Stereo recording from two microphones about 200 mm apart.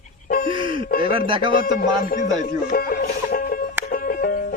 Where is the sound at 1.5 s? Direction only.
45° left (ahead or behind).